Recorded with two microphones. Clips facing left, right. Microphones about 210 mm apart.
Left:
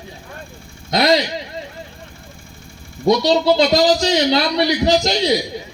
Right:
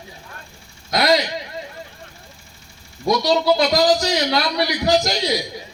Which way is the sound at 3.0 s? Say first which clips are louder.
Left 3 dB; 25° left (ahead or behind).